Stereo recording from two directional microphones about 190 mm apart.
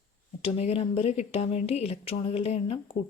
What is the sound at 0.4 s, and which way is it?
Speech, 35° left (ahead or behind).